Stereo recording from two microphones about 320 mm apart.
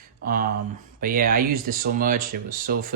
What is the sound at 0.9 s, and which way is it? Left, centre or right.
Speech, right.